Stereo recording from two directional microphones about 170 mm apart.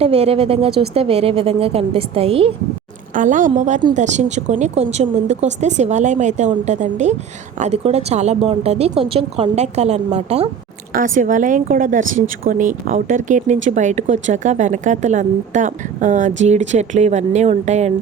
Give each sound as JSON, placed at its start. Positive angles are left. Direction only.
{"t": 0.0, "sound": "speech", "side_deg": -35}
{"t": 3.2, "sound": "speech", "side_deg": -50}
{"t": 10.9, "sound": "speech", "side_deg": -50}